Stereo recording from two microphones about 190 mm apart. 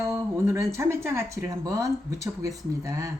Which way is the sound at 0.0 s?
15° right (ahead or behind).